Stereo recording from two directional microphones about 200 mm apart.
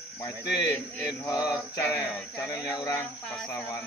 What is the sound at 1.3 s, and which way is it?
Speech, 5° right (ahead or behind).